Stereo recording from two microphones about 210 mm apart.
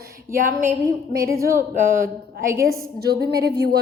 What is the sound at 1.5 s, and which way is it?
A woman's voice, 40° right (ahead or behind).